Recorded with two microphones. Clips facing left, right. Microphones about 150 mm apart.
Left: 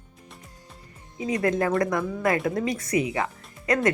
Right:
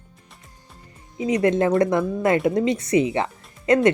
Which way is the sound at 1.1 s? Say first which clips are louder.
Right 5 dB; 20° right (ahead or behind).